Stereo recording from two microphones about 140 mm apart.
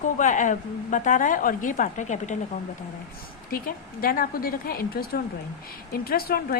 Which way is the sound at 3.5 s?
90° left.